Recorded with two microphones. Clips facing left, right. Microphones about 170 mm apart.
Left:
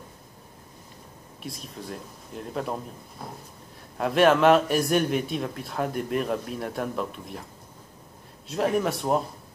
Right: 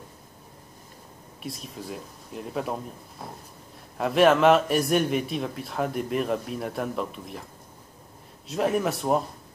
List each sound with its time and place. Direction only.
1.4 s a man's voice: centre (ahead or behind)
8.5 s a man's voice: centre (ahead or behind)